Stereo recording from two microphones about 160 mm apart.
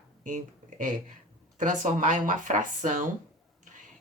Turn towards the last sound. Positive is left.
turn(degrees=-50)  # may be behind; listen again after turning